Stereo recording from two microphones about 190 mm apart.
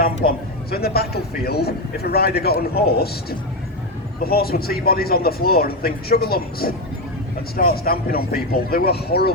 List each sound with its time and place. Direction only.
0.3 s a man's voice: 55° left (ahead or behind)